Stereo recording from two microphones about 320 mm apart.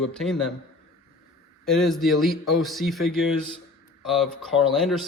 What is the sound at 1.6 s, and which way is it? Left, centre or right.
Speech, centre.